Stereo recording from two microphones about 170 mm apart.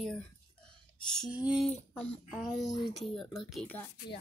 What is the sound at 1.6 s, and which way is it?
A woman's voice, 5° left (ahead or behind).